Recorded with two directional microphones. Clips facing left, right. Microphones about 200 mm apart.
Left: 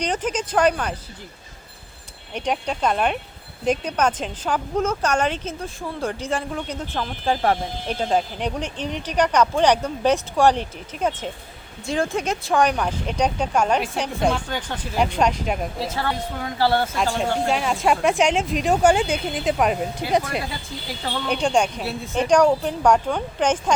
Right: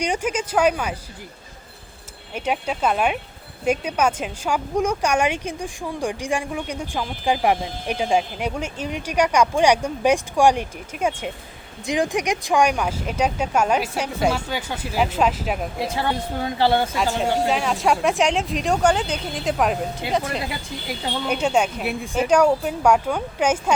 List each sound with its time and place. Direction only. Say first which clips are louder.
0.0 s speech: right 1 dB; 10° right (ahead or behind)
2.3 s speech: even; 5° right (ahead or behind)
15.8 s speech: right 2 dB; 15° right (ahead or behind)
17.4 s speech: even; centre (ahead or behind)
20.0 s speech: left 3 dB; 25° right (ahead or behind)
21.2 s speech: even; 5° right (ahead or behind)